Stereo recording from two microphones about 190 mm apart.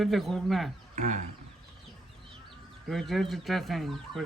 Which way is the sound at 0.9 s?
40° right (ahead or behind).